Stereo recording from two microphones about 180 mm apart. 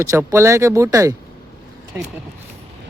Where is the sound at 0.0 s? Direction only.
15° right (ahead or behind).